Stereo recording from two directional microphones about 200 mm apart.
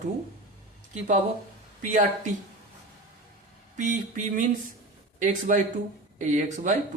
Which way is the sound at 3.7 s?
40° right (ahead or behind).